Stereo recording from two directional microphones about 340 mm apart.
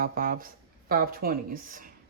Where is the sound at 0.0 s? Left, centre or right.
Right.